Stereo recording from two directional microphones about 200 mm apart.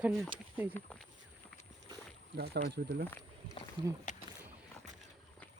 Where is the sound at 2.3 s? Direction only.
50° right (ahead or behind).